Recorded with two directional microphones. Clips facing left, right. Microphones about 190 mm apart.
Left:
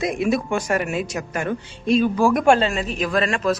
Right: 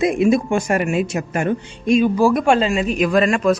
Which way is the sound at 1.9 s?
10° right (ahead or behind).